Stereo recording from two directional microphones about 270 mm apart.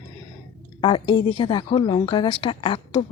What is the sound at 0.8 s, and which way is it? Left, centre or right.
A woman's voice, centre.